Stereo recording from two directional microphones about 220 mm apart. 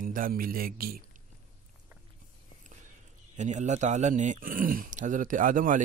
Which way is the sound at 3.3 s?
35° right (ahead or behind).